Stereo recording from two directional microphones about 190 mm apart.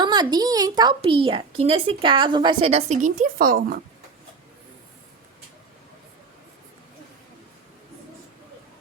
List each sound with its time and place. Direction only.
0.0 s a child's voice: 20° right (ahead or behind); by 3.8 s 50° right (ahead or behind)